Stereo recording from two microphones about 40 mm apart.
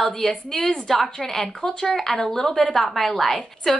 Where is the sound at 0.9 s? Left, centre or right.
Centre.